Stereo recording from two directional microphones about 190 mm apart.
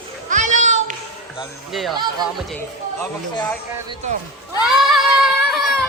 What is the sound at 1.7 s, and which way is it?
Speech, centre (ahead or behind).